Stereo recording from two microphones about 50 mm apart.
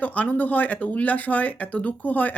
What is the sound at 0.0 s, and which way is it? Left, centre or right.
Speech, left.